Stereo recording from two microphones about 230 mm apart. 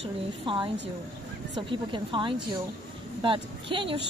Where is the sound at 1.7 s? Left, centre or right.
Right.